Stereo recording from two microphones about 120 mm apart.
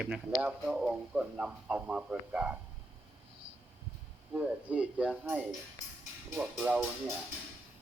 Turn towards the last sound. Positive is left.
turn(degrees=-15)  # may be behind; listen again after turning